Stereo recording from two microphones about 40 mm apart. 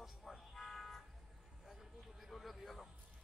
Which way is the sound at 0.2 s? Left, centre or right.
Centre.